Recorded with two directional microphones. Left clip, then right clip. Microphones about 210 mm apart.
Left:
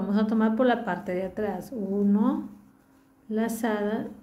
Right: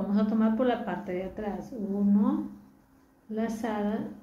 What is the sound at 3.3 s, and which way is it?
Speech, 55° left (ahead or behind).